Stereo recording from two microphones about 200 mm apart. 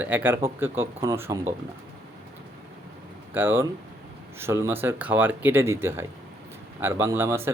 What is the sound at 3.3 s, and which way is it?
Speech, 10° right (ahead or behind).